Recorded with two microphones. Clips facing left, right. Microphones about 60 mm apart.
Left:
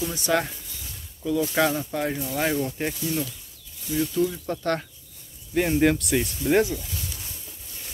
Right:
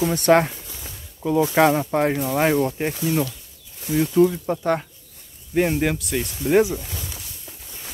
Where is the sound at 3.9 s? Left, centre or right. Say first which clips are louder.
Right 7 dB; right.